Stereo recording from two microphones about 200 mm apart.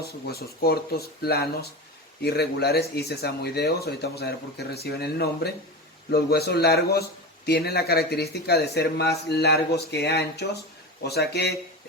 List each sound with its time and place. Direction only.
0.0 s speech: 50° left (ahead or behind)